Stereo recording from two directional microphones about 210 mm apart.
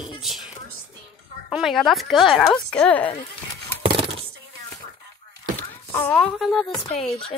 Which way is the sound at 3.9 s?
25° right (ahead or behind).